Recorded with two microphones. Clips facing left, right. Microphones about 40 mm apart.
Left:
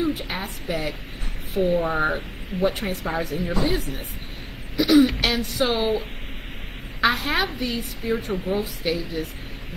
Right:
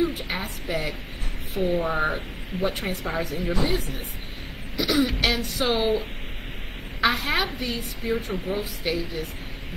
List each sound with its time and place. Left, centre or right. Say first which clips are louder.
0.0 s speech: even; centre